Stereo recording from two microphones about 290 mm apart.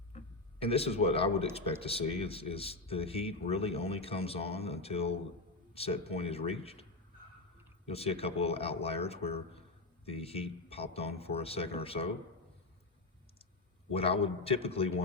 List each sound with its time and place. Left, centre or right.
0.6 s speech: centre
7.9 s speech: left
13.9 s speech: centre